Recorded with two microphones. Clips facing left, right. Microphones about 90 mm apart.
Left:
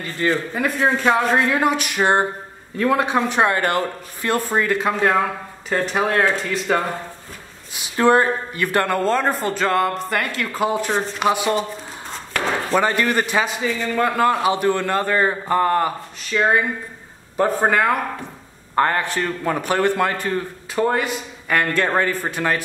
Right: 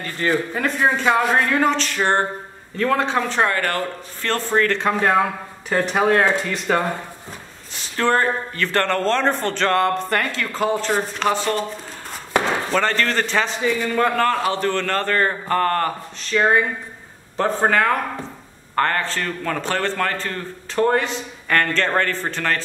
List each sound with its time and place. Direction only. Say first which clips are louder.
0.6 s a man's voice: even; 5° left (ahead or behind)
10.9 s speech: even; centre (ahead or behind)
11.1 s a man's voice: left 2 dB; 10° left (ahead or behind)
12.3 s chop: right 2 dB; 20° right (ahead or behind)
12.7 s a man's voice: left 3 dB; 15° left (ahead or behind)